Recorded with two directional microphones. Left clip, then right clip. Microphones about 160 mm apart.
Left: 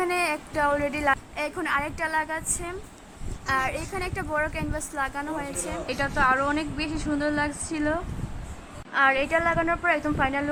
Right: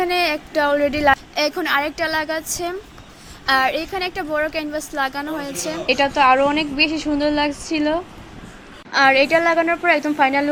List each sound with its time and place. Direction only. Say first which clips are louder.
0.0 s a woman's voice: right 6 dB; 15° right (ahead or behind)
3.4 s a woman's voice: right 9 dB; 25° right (ahead or behind)